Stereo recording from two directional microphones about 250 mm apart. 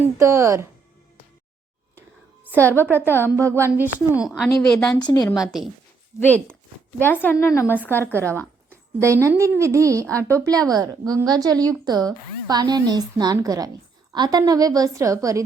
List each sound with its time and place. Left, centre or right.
0.2 s speech: centre
3.1 s speech: centre
3.3 s a woman's voice: centre
4.9 s speech: centre
5.4 s a woman's voice: centre
7.0 s speech: centre
9.0 s speech: centre